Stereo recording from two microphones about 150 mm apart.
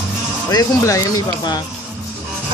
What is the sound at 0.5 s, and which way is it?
Speech, 25° left (ahead or behind).